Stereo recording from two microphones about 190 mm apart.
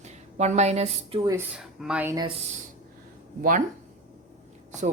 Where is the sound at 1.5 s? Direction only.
5° right (ahead or behind).